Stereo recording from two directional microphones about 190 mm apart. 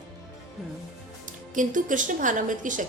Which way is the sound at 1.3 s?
45° right (ahead or behind).